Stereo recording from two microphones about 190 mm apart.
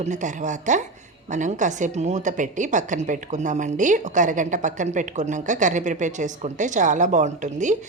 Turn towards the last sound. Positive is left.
turn(degrees=-40)  # may be behind; listen again after turning